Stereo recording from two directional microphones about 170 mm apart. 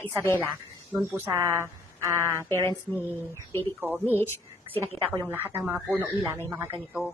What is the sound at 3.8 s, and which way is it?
A woman's voice, 10° right (ahead or behind).